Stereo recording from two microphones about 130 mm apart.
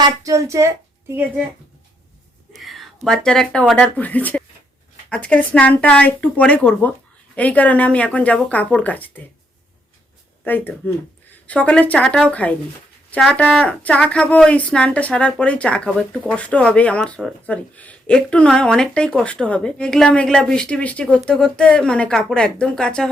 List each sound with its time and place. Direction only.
0.2 s a woman's voice: 25° right (ahead or behind)
2.6 s speech: centre (ahead or behind)
10.4 s speech: 15° left (ahead or behind)